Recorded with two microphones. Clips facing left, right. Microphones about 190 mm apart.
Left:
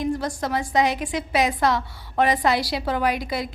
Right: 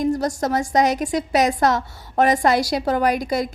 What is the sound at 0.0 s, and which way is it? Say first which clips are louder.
A woman's voice: right 4 dB; 40° right (ahead or behind).